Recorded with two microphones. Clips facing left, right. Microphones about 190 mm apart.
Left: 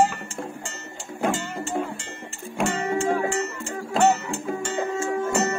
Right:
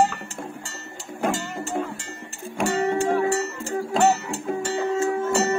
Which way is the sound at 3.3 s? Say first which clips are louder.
Right 2 dB; 35° right (ahead or behind).